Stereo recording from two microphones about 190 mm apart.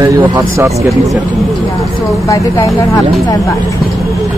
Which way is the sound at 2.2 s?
15° left (ahead or behind).